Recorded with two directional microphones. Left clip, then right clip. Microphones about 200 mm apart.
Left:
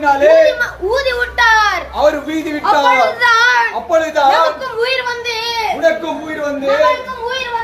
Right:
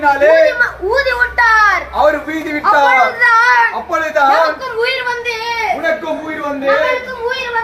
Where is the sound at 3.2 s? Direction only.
50° left (ahead or behind).